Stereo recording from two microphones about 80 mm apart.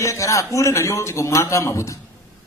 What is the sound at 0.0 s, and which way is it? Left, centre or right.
A man's voice, left.